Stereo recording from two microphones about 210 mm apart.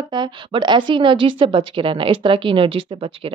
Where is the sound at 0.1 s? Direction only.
20° right (ahead or behind).